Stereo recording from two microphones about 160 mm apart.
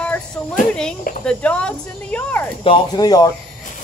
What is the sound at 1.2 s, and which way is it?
Speech, 5° left (ahead or behind).